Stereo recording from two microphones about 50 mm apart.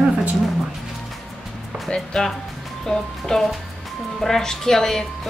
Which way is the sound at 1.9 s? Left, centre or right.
Centre.